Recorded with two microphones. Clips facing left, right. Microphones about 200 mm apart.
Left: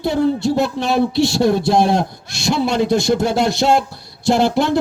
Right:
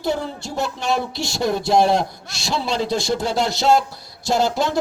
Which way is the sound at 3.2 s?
50° left (ahead or behind).